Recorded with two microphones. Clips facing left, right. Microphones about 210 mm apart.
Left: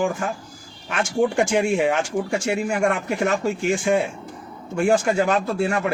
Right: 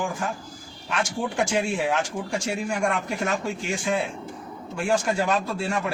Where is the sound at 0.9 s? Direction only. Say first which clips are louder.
Left 7 dB; 50° left (ahead or behind).